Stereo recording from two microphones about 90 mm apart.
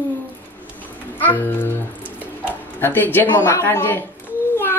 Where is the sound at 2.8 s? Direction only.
25° left (ahead or behind).